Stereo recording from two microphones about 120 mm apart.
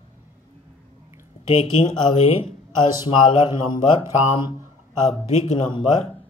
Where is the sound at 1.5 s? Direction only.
55° left (ahead or behind).